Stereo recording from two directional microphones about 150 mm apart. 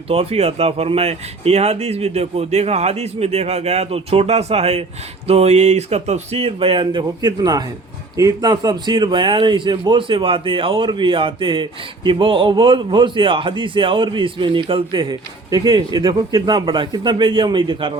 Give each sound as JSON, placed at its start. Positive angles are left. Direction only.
{"t": 0.1, "sound": "a man's voice", "side_deg": -40}